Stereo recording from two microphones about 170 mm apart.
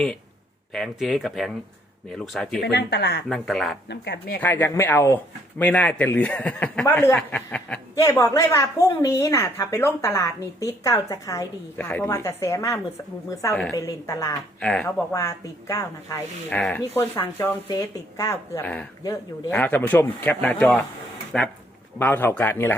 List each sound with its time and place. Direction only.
0.7 s speech: centre (ahead or behind)
2.6 s speech: 75° left (ahead or behind)
3.2 s speech: centre (ahead or behind)
3.8 s speech: 75° left (ahead or behind)
4.4 s speech: 10° left (ahead or behind)
8.2 s a woman's voice: 15° left (ahead or behind)
14.6 s speech: 5° left (ahead or behind)
15.1 s a woman's voice: 20° left (ahead or behind)
16.5 s speech: 5° left (ahead or behind)